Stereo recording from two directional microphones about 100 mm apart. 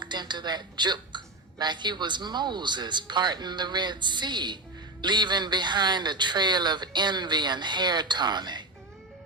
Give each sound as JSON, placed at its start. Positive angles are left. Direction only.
{"t": 0.0, "sound": "a woman's voice", "side_deg": -50}